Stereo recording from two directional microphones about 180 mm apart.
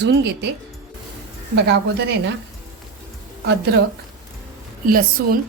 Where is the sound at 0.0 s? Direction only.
70° right (ahead or behind).